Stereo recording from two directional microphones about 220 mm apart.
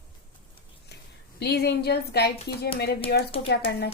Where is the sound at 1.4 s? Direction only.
50° left (ahead or behind).